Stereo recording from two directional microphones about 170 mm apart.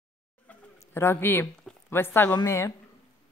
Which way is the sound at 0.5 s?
15° left (ahead or behind).